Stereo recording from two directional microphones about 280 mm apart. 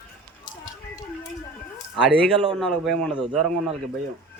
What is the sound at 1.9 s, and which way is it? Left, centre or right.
A man's voice, centre.